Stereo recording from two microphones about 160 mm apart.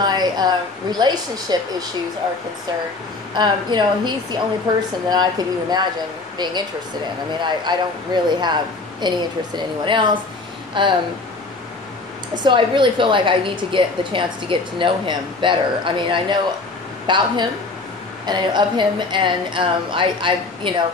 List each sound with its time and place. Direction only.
0.0 s a woman's voice: 25° right (ahead or behind)
3.3 s a woman's voice: 30° right (ahead or behind)
12.4 s a woman's voice: 30° right (ahead or behind)